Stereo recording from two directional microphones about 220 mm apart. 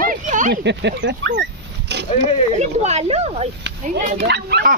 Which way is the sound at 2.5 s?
30° right (ahead or behind).